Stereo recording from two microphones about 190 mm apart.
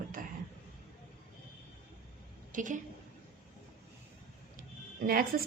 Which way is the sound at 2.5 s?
45° right (ahead or behind).